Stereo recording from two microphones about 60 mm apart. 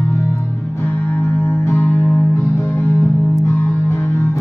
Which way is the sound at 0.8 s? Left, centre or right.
Left.